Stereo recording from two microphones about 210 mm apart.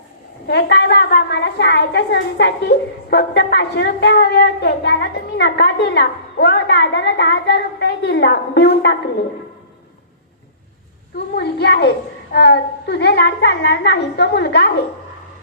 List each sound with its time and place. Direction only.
0.4 s a woman's voice: 50° left (ahead or behind)
11.3 s a woman's voice: 55° left (ahead or behind)